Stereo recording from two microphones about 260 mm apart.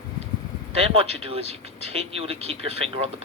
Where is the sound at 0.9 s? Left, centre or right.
Right.